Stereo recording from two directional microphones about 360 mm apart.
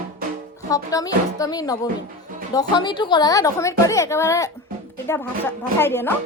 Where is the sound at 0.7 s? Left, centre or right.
Centre.